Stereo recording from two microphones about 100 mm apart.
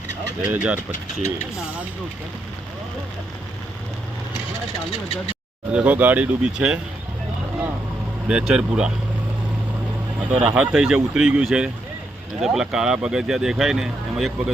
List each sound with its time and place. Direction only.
0.4 s speech: 20° right (ahead or behind)
4.9 s speech: 70° left (ahead or behind)
5.7 s speech: 15° right (ahead or behind)
8.3 s speech: 10° right (ahead or behind)
10.3 s speech: 10° right (ahead or behind)